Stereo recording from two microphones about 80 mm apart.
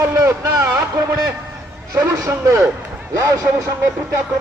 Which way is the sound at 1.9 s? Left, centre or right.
Right.